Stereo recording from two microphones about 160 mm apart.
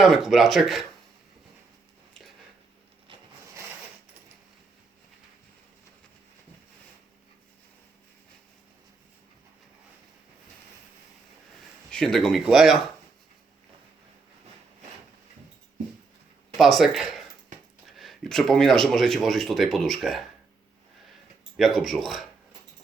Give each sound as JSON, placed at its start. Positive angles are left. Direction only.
{"t": 0.0, "sound": "speech", "side_deg": 0}
{"t": 3.1, "sound": "a sound", "side_deg": -30}
{"t": 11.9, "sound": "speech", "side_deg": 5}
{"t": 16.6, "sound": "speech", "side_deg": 0}
{"t": 21.5, "sound": "speech", "side_deg": 0}